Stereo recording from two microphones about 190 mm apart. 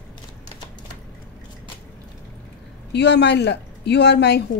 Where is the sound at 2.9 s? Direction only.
65° left (ahead or behind).